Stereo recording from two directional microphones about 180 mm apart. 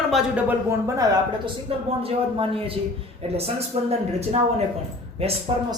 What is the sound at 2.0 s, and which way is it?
Speech, 30° right (ahead or behind).